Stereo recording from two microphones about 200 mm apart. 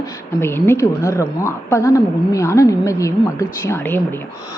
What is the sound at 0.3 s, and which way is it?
A woman's voice, 10° left (ahead or behind).